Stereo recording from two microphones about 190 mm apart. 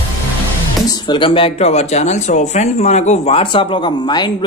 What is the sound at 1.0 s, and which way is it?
A man's voice, 25° left (ahead or behind).